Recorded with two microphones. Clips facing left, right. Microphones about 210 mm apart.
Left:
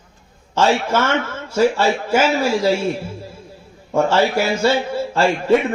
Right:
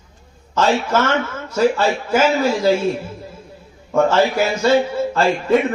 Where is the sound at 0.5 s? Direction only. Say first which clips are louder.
Even; 30° left (ahead or behind).